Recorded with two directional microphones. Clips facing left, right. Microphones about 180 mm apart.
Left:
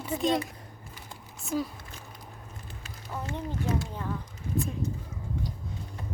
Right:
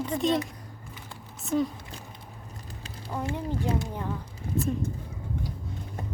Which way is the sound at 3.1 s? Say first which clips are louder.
Right 4 dB; 10° right (ahead or behind).